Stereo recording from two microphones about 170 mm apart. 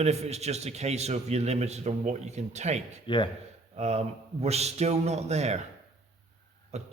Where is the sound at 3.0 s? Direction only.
30° left (ahead or behind).